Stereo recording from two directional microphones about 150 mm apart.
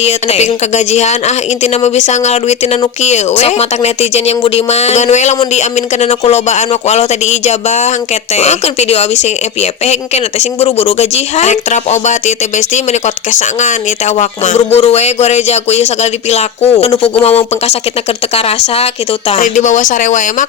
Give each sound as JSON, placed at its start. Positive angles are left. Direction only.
{"t": 0.0, "sound": "a woman's voice", "side_deg": 45}
{"t": 19.4, "sound": "speech", "side_deg": 60}